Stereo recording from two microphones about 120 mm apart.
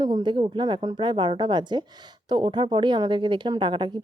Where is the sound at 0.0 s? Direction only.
35° right (ahead or behind).